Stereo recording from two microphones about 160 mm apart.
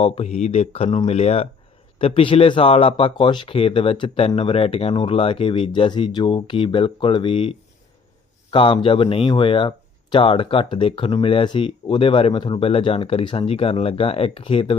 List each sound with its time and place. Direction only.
0.0 s speech: 40° left (ahead or behind)